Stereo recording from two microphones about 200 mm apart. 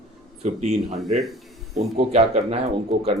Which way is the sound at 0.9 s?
Centre (ahead or behind).